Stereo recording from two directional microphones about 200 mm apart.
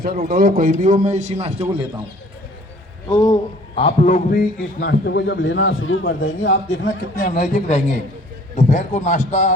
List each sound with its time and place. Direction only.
0.3 s a man's voice: 45° right (ahead or behind)
3.1 s speech: 20° left (ahead or behind)
3.8 s speech: 35° left (ahead or behind)
4.8 s a man's voice: 60° left (ahead or behind); by 6.0 s 80° left
6.0 s a man's voice: 65° left (ahead or behind)
7.2 s speech: 40° left (ahead or behind)